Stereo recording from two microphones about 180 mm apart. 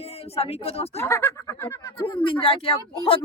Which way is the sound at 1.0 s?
15° left (ahead or behind).